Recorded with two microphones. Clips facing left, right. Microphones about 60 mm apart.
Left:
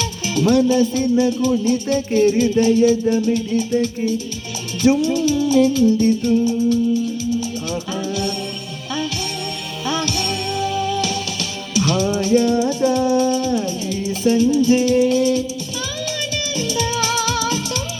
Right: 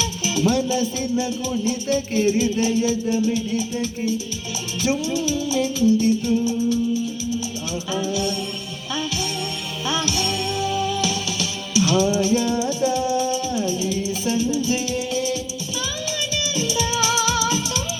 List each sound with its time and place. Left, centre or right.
0.0 s music: left
7.9 s music: left
9.8 s music: left
16.6 s music: left